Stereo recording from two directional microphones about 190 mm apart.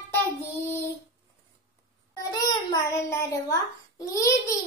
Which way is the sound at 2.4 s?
20° left (ahead or behind).